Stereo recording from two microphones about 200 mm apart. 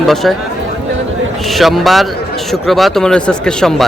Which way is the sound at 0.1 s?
Centre (ahead or behind).